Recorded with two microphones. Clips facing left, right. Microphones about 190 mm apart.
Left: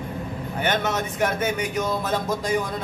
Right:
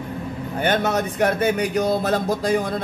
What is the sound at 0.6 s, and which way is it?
A man's voice, 35° right (ahead or behind).